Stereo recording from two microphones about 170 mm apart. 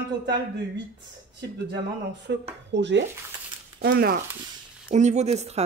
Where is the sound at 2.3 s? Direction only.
90° right.